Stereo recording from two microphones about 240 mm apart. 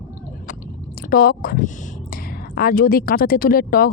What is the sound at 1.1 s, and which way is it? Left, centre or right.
Speech, left.